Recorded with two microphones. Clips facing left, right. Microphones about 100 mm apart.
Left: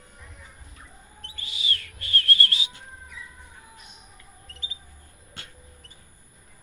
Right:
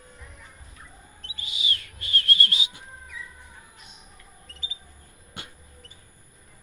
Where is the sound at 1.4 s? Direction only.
15° right (ahead or behind).